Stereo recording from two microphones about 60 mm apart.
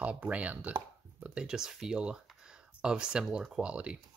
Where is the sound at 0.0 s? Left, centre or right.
Right.